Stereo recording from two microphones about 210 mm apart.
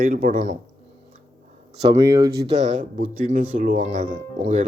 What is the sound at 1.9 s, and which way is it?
Speech, 15° right (ahead or behind).